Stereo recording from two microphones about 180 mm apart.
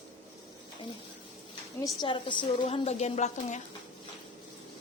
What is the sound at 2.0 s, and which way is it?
A woman's voice, 25° left (ahead or behind).